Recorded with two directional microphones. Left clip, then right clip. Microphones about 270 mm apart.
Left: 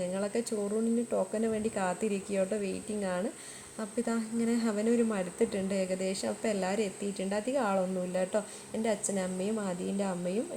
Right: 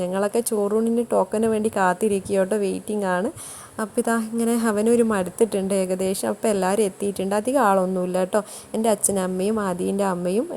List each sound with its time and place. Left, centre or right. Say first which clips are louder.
0.0 s a woman's voice: right 10 dB; right